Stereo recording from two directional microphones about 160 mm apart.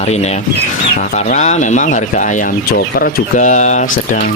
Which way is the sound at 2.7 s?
70° left (ahead or behind).